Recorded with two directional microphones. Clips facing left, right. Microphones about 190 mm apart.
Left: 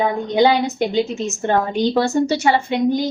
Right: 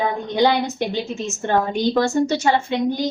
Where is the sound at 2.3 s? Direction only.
15° left (ahead or behind).